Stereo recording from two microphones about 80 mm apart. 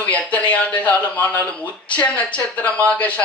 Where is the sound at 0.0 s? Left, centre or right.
Centre.